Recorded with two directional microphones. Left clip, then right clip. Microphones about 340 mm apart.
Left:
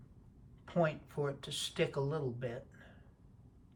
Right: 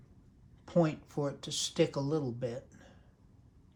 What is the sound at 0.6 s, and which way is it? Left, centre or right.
Speech, centre.